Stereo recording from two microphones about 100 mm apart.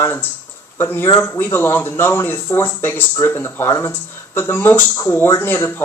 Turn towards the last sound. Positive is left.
turn(degrees=20)  # may be behind; listen again after turning